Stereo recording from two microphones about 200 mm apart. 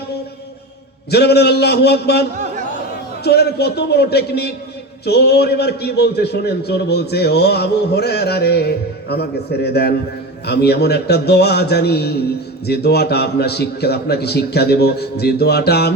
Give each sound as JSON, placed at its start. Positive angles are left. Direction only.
{"t": 1.1, "sound": "a man's voice", "side_deg": 55}
{"t": 3.2, "sound": "a man's voice", "side_deg": 55}